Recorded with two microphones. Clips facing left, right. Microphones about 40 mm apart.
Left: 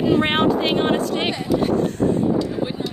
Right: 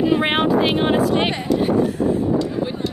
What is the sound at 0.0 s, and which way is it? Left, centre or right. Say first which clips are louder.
Speech: even; centre.